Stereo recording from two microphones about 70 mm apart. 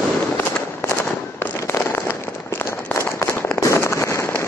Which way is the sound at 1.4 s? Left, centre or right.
Left.